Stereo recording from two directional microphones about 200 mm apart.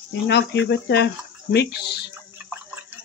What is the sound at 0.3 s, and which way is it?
Speech, 60° left (ahead or behind).